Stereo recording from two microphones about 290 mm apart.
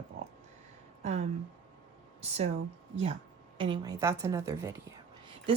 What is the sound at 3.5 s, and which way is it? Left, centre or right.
Speech, centre.